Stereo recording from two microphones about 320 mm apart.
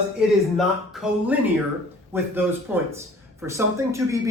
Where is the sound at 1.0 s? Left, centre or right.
Centre.